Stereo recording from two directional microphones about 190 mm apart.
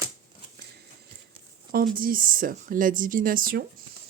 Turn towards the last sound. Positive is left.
turn(degrees=-50)  # may be behind; listen again after turning